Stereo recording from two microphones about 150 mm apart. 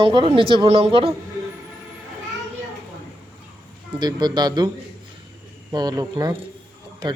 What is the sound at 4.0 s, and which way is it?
Speech, 30° right (ahead or behind).